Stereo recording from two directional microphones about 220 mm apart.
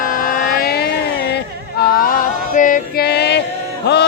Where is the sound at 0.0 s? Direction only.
40° left (ahead or behind).